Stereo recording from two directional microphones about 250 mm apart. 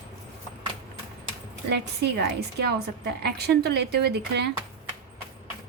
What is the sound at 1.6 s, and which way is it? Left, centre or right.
A woman's voice, right.